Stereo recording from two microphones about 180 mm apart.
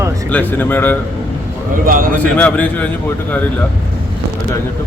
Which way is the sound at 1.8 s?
50° right (ahead or behind).